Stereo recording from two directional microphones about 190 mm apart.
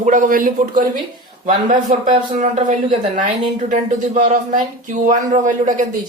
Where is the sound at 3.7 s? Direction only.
40° right (ahead or behind).